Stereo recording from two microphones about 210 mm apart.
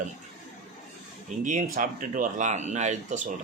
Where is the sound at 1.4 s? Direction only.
40° right (ahead or behind).